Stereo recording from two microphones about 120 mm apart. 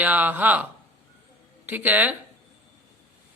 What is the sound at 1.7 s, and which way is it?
Speech, 15° right (ahead or behind).